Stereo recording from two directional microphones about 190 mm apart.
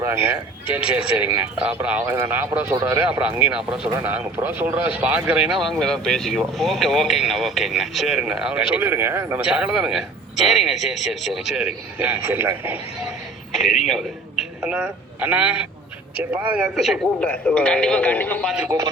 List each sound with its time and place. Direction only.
0.0 s a man's voice: 15° right (ahead or behind)
13.5 s a man's voice: centre (ahead or behind)
18.7 s speech: 20° right (ahead or behind)